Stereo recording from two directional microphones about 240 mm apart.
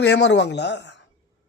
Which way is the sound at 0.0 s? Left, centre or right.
Left.